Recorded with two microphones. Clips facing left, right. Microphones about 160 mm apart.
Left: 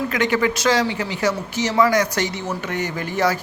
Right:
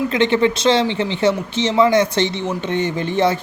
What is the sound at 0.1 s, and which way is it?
Speech, 25° right (ahead or behind).